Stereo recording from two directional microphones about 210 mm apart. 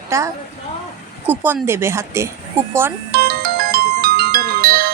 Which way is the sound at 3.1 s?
45° right (ahead or behind).